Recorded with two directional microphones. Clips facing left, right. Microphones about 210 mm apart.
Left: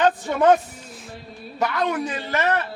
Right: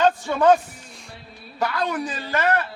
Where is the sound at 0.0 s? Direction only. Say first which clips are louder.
Even; 20° left (ahead or behind).